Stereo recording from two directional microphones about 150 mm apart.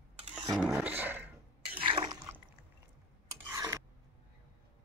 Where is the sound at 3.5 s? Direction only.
20° right (ahead or behind).